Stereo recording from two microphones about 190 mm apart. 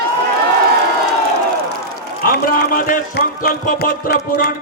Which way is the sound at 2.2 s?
50° left (ahead or behind).